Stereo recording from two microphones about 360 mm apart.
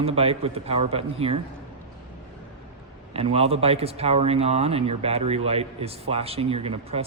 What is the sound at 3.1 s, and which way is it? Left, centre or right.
Speech, centre.